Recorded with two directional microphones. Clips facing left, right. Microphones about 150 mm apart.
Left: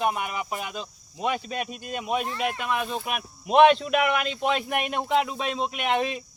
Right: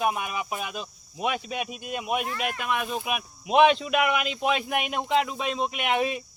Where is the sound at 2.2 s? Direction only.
25° left (ahead or behind).